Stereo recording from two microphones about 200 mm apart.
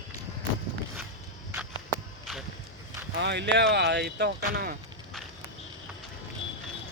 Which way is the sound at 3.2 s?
60° right (ahead or behind).